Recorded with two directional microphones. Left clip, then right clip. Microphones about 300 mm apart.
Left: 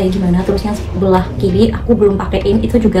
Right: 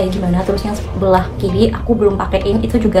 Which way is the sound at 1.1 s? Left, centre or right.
Centre.